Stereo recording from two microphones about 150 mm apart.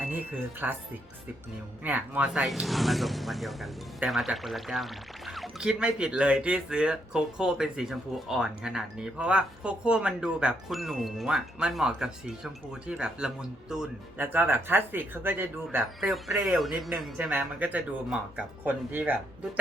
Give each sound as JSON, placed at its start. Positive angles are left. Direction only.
{"t": 0.6, "sound": "speech", "side_deg": -10}
{"t": 1.8, "sound": "speech", "side_deg": -10}
{"t": 16.0, "sound": "speech", "side_deg": 0}